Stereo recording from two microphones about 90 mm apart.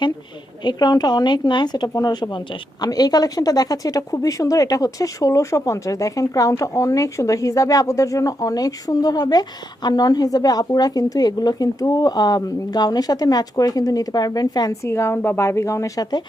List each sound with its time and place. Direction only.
0.6 s speech: 50° left (ahead or behind)
2.9 s speech: 45° left (ahead or behind)
14.8 s speech: 30° left (ahead or behind)